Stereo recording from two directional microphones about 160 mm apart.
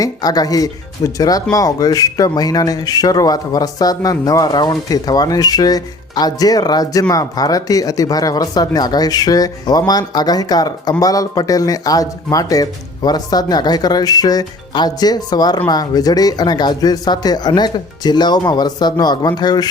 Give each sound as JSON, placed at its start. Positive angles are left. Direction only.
{"t": 0.0, "sound": "speech", "side_deg": 25}